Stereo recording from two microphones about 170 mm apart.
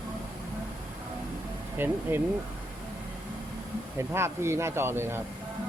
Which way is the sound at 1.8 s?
10° right (ahead or behind).